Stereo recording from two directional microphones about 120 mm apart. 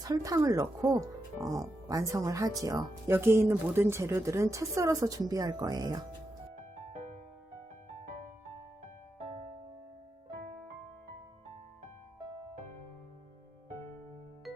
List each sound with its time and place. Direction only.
0.0 s a woman's voice: 30° right (ahead or behind)
6.9 s music: 75° right (ahead or behind)